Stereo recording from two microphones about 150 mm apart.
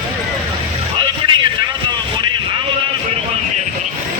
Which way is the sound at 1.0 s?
30° right (ahead or behind).